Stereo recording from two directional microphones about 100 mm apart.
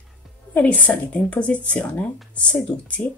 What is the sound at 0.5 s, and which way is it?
Speech, 15° left (ahead or behind).